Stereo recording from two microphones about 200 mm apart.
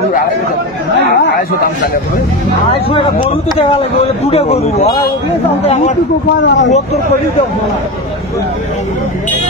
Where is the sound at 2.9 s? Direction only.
25° left (ahead or behind).